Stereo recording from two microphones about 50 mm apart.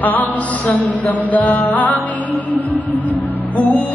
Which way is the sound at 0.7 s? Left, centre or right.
Left.